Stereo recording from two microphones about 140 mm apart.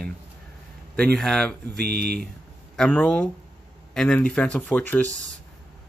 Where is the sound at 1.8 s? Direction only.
90° right.